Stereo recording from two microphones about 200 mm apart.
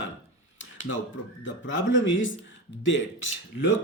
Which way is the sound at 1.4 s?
70° left (ahead or behind).